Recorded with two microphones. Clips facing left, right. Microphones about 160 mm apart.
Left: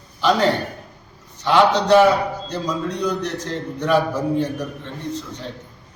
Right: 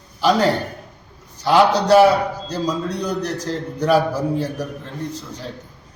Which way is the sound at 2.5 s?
35° right (ahead or behind).